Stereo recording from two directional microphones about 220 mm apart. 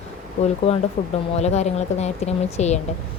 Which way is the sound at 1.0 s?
35° left (ahead or behind).